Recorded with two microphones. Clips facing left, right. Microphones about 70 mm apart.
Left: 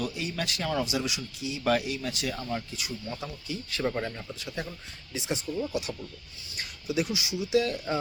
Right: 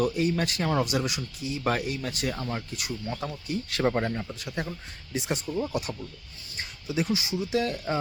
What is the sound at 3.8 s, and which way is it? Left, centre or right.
Speech, right.